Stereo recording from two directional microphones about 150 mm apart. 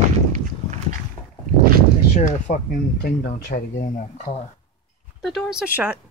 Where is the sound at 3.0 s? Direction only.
90° left; by 4.3 s 60° left (ahead or behind).